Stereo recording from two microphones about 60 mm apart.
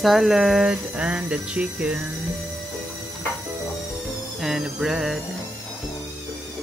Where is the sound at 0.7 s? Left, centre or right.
Right.